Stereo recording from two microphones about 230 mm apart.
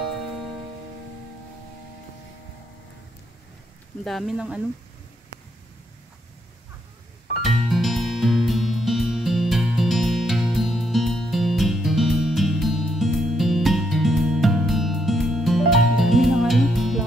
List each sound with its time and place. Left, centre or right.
4.0 s speech: centre
7.4 s music: centre